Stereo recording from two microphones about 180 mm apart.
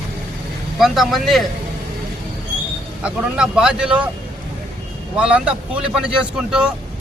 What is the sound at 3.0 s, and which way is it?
Speech, 5° right (ahead or behind).